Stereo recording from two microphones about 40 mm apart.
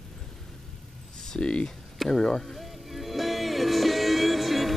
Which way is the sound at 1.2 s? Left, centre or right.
Left.